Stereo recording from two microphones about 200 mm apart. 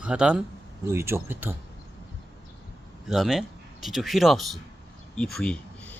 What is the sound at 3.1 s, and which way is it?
Speech, centre (ahead or behind).